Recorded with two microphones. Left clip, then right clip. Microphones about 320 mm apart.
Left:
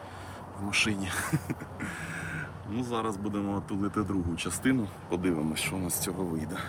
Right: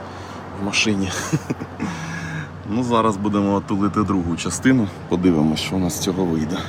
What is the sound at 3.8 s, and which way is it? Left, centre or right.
Speech, right.